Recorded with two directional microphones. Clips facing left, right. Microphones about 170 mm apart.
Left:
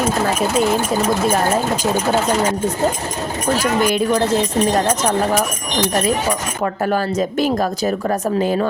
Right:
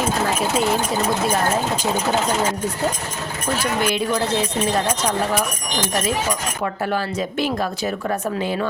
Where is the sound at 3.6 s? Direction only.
45° left (ahead or behind).